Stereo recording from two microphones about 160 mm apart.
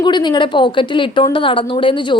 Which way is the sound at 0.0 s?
30° left (ahead or behind).